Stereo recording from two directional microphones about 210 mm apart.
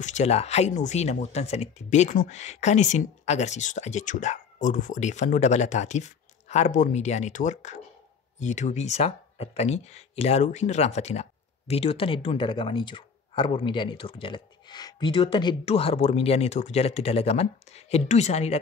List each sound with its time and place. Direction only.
0.0 s speech: 30° left (ahead or behind)